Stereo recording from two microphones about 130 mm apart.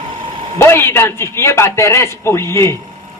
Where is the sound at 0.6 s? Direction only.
20° left (ahead or behind).